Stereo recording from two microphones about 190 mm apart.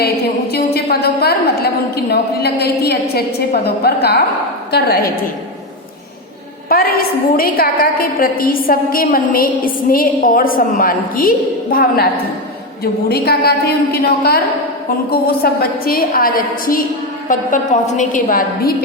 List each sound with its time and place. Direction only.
0.5 s a sound: 55° left (ahead or behind)
4.7 s a woman's voice: 50° left (ahead or behind)
6.7 s a woman's voice: 50° left (ahead or behind)